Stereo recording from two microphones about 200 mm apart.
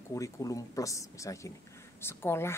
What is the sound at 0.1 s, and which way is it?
Speech, 15° left (ahead or behind).